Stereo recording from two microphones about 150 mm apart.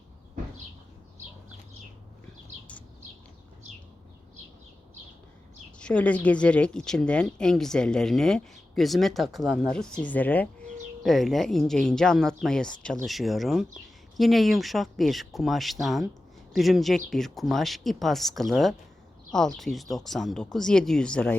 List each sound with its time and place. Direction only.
5.8 s speech: 10° left (ahead or behind)